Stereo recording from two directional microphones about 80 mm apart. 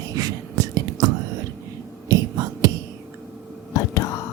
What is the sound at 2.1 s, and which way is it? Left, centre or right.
Whispering, right.